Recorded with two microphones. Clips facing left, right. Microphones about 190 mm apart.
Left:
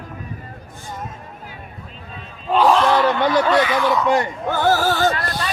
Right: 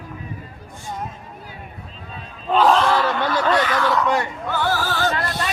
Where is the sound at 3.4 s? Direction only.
10° left (ahead or behind).